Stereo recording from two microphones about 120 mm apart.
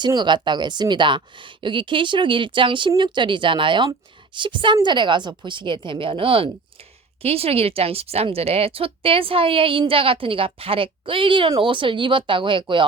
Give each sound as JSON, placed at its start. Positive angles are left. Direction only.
{"t": 0.0, "sound": "a woman's voice", "side_deg": -40}